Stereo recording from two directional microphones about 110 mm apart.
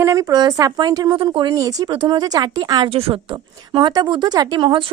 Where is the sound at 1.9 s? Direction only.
45° right (ahead or behind).